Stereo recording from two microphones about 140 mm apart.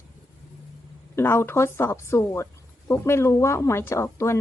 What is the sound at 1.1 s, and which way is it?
Speech, 15° left (ahead or behind).